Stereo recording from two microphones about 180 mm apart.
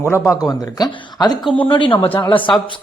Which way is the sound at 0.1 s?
15° left (ahead or behind).